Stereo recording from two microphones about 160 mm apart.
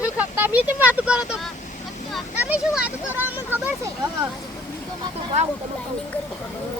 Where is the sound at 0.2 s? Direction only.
10° right (ahead or behind).